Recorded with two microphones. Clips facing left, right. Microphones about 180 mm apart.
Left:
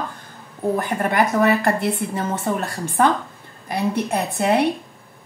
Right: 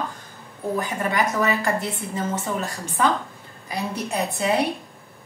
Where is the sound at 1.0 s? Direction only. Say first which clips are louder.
Left 5 dB; 55° left (ahead or behind).